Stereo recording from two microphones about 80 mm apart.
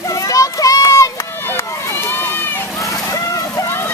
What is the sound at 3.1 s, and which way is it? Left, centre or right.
Slosh, left.